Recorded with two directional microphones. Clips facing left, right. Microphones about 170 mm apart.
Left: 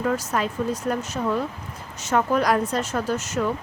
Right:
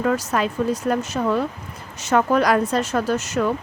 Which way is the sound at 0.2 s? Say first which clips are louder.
Right 3 dB; 80° right.